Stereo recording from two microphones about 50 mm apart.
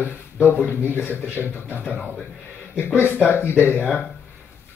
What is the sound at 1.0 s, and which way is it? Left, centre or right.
Speech, right.